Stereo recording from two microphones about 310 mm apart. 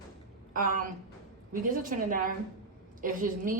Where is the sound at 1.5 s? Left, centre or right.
Right.